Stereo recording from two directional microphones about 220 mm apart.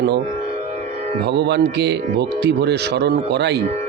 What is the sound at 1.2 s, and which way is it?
Speech, 50° right (ahead or behind).